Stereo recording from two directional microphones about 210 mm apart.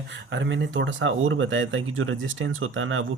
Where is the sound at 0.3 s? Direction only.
60° right (ahead or behind).